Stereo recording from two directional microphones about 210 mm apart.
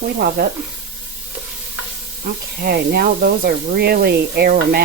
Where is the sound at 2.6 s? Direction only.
50° right (ahead or behind).